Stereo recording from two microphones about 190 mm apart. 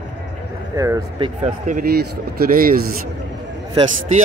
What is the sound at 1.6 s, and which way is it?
A man's voice, 50° right (ahead or behind).